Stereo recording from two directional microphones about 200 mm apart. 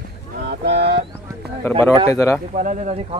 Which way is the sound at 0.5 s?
55° right (ahead or behind).